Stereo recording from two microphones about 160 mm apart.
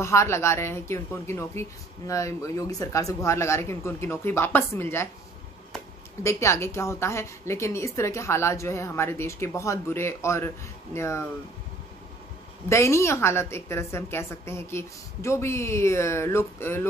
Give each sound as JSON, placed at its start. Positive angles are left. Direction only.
{"t": 0.0, "sound": "a woman's voice", "side_deg": 15}
{"t": 6.2, "sound": "a woman's voice", "side_deg": 15}
{"t": 12.6, "sound": "a woman's voice", "side_deg": 15}